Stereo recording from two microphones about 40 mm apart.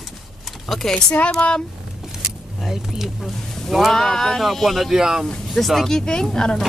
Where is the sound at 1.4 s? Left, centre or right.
Left.